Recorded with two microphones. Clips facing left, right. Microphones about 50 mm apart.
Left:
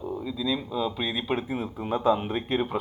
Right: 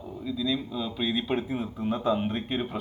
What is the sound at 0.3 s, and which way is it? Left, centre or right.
A man's voice, centre.